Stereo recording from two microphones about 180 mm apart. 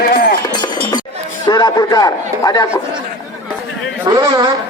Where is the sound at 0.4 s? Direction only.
20° left (ahead or behind).